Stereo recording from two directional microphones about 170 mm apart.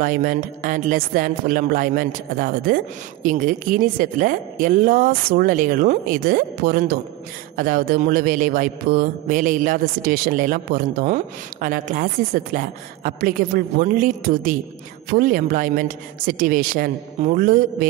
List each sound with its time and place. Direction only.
0.0 s a woman's voice: 55° right (ahead or behind)